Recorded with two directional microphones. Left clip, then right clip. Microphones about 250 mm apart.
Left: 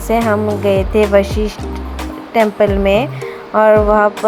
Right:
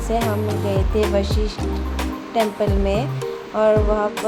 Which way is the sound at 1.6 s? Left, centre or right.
Centre.